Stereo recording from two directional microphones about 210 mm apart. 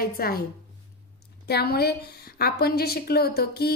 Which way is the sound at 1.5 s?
50° left (ahead or behind).